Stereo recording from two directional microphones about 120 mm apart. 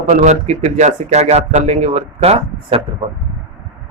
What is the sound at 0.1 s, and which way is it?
Speech, 80° right.